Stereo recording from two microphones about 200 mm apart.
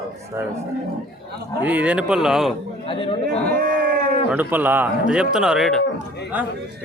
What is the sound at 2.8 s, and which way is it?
Speech, 25° left (ahead or behind).